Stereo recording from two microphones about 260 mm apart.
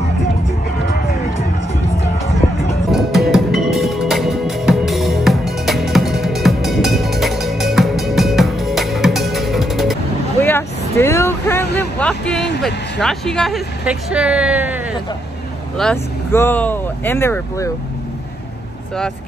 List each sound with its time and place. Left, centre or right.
2.9 s music: centre
10.4 s vehicle: centre
13.0 s speech: centre
15.8 s speech: centre